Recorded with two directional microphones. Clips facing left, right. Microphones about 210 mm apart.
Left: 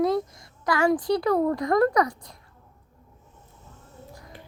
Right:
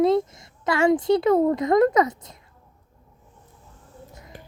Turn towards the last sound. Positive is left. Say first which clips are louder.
# left 1 dB
turn(degrees=-20)  # may be behind; listen again after turning